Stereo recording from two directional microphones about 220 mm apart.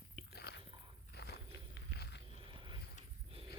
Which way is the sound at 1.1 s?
50° left (ahead or behind).